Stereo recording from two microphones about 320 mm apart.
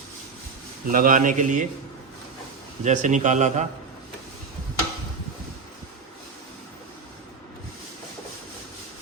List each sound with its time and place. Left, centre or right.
0.9 s speech: right
2.8 s speech: right